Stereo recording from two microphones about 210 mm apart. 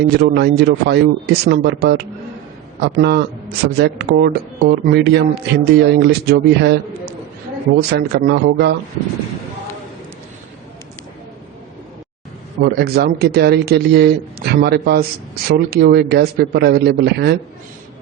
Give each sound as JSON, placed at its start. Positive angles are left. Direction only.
{"t": 0.0, "sound": "speech", "side_deg": -50}
{"t": 12.6, "sound": "speech", "side_deg": -45}